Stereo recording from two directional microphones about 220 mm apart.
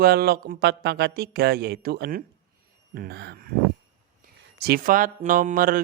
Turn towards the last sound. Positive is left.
turn(degrees=-40)  # may be behind; listen again after turning